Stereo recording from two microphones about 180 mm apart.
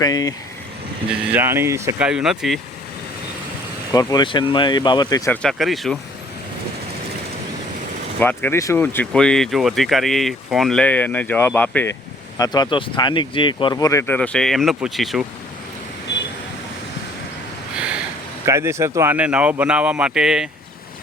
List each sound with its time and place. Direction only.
0.0 s speech: 20° left (ahead or behind)
1.2 s speech: 10° right (ahead or behind)
2.0 s speech: 5° right (ahead or behind)
3.9 s speech: 25° left (ahead or behind)
5.3 s speech: 5° left (ahead or behind)
8.2 s speech: 10° left (ahead or behind)
12.4 s speech: 25° left (ahead or behind)
14.1 s speech: 5° left (ahead or behind)
18.4 s speech: 15° right (ahead or behind)